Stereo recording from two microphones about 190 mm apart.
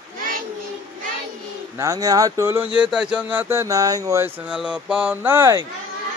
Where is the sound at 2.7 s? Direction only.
5° right (ahead or behind).